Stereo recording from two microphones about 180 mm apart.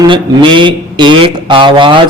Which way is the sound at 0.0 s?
25° right (ahead or behind).